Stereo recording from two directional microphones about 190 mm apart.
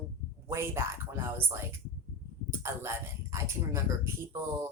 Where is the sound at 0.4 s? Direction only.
15° right (ahead or behind).